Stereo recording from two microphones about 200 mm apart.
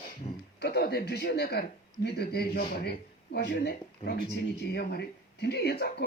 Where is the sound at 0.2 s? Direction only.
35° left (ahead or behind).